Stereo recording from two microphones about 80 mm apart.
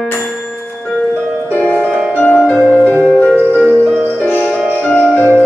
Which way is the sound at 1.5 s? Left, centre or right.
Left.